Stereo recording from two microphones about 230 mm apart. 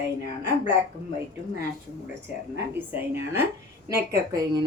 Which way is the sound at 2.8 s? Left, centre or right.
Centre.